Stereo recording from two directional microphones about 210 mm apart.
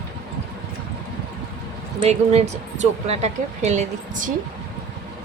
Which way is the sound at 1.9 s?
30° right (ahead or behind).